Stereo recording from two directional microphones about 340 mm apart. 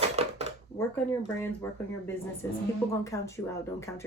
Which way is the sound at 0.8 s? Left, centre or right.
Centre.